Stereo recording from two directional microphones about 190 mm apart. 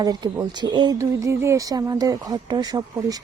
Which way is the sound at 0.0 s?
20° right (ahead or behind).